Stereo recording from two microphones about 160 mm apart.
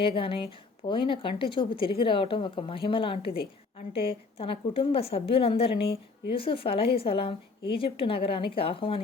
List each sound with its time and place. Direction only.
0.0 s a woman's voice: 35° left (ahead or behind)